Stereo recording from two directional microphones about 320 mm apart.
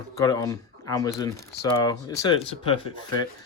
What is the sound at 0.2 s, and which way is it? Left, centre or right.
Speech, centre.